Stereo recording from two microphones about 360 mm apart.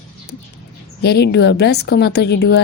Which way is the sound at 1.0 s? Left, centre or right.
Left.